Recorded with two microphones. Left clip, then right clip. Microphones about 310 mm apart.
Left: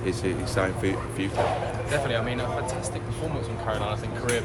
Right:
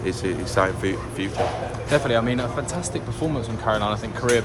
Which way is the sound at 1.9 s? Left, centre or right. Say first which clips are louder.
Right 7 dB; right.